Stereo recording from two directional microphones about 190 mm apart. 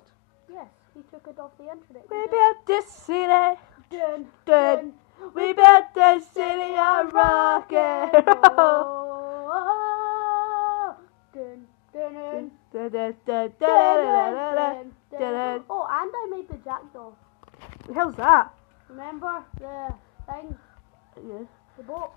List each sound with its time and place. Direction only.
2.0 s speech: 55° right (ahead or behind)
3.1 s a sound: 55° right (ahead or behind)
3.9 s a woman's voice: 20° right (ahead or behind)
4.5 s speech: 50° right (ahead or behind)
6.5 s a sound: 60° right (ahead or behind)
7.4 s speech: 50° right (ahead or behind)
9.5 s humming: 30° right (ahead or behind)
11.9 s female singing: 20° right (ahead or behind)
12.7 s a sound: 55° right (ahead or behind)
15.1 s speech: 55° right (ahead or behind)
15.6 s a woman's voice: 30° right (ahead or behind)
17.9 s speech: 50° right (ahead or behind)
18.9 s a woman's voice: 30° right (ahead or behind)
21.1 s speech: 60° right (ahead or behind)